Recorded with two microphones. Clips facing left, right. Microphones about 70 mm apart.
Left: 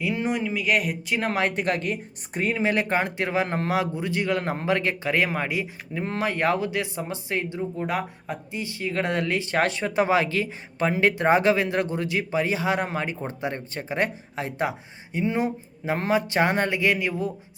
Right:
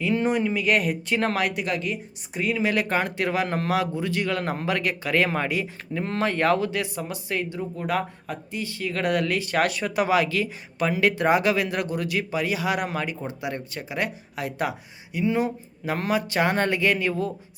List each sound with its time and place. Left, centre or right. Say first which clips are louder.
0.0 s speech: right 3 dB; centre
0.3 s speech: right 1 dB; centre
1.5 s speech: left 2 dB; left
5.2 s speech: right 1 dB; centre